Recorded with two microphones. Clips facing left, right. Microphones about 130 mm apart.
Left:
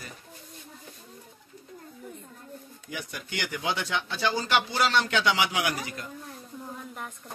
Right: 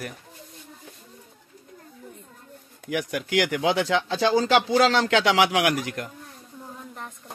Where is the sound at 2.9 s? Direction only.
85° right.